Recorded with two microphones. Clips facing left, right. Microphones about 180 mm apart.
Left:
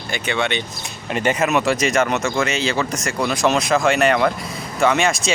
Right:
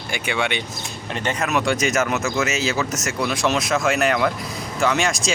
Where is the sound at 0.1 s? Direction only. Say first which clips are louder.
Left 2 dB; 10° right (ahead or behind).